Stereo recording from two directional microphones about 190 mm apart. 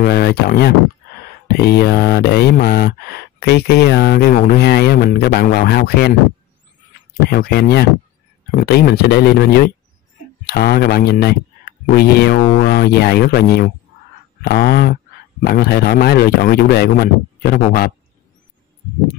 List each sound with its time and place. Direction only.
0.0 s mantra: 55° left (ahead or behind)
7.2 s mantra: 55° left (ahead or behind)